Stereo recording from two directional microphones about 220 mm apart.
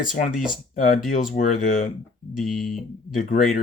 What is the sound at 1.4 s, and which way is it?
Speech, 40° left (ahead or behind).